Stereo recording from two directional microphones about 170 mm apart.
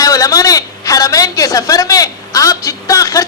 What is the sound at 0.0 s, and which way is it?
A woman's voice, 20° left (ahead or behind).